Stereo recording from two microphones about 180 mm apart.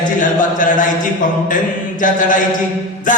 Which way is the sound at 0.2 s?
45° left (ahead or behind).